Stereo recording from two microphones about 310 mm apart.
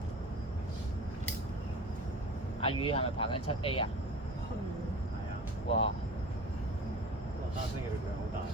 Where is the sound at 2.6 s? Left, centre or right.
Centre.